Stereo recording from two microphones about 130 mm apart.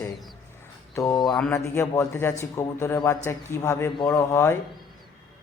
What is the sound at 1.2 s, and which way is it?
Mantra, centre (ahead or behind).